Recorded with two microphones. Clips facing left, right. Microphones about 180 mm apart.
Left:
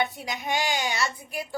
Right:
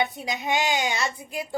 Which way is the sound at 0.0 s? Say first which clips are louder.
Right 2 dB; 20° right (ahead or behind).